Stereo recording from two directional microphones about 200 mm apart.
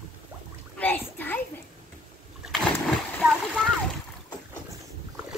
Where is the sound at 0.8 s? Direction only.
10° left (ahead or behind).